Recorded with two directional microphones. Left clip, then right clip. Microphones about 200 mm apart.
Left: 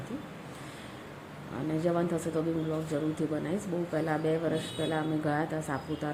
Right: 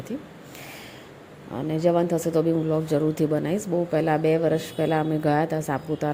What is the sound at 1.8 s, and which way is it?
A woman's voice, 35° right (ahead or behind).